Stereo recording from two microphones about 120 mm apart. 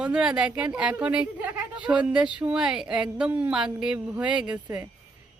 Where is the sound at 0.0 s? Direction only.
5° right (ahead or behind).